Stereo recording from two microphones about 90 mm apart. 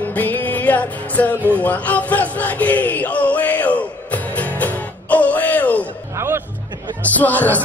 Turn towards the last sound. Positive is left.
turn(degrees=20)  # may be behind; listen again after turning